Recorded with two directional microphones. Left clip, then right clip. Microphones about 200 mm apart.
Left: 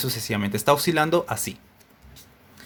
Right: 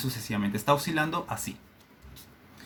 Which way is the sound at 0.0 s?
50° left (ahead or behind).